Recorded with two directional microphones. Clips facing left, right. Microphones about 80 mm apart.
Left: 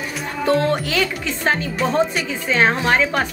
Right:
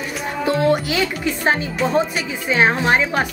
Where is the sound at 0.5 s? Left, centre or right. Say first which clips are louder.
Right 1 dB; centre.